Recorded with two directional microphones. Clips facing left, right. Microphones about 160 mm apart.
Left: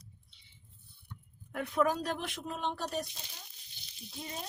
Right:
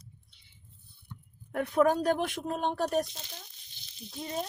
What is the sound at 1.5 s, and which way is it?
A woman's voice, 45° right (ahead or behind).